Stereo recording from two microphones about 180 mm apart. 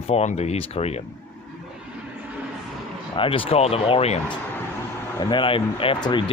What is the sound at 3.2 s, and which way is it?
Speech, 30° left (ahead or behind).